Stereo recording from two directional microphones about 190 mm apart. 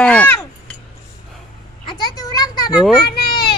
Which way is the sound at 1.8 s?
25° left (ahead or behind).